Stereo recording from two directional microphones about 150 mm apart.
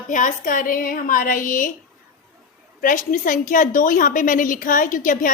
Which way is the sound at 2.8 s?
65° left (ahead or behind).